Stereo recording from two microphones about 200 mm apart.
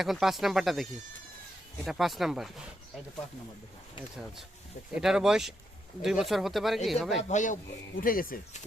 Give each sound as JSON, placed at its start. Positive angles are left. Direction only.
{"t": 0.0, "sound": "speech", "side_deg": 0}
{"t": 4.9, "sound": "speech", "side_deg": -5}
{"t": 7.2, "sound": "speech", "side_deg": 35}